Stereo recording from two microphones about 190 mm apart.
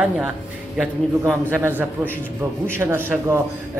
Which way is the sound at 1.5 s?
10° right (ahead or behind).